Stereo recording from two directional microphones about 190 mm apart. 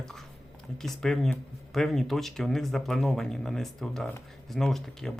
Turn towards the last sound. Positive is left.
turn(degrees=0)  # may be behind; listen again after turning